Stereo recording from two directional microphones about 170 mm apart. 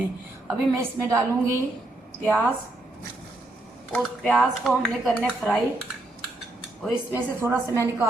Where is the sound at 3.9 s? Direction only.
5° left (ahead or behind).